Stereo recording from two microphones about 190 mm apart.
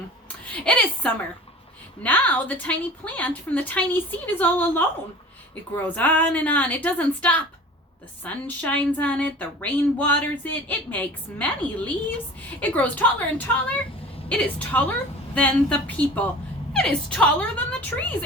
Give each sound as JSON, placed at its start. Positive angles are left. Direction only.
{"t": 0.5, "sound": "a woman's voice", "side_deg": 5}